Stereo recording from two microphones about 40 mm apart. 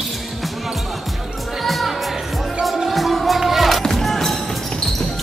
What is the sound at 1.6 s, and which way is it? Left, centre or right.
Music, centre.